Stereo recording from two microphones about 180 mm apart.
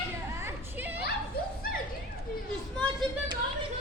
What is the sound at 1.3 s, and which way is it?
Bow-wow, 60° left (ahead or behind).